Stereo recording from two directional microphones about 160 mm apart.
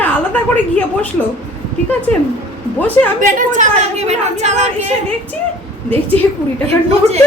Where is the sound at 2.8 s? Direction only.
10° left (ahead or behind).